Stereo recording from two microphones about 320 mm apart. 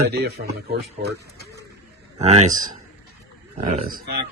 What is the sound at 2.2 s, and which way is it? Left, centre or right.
Speech, centre.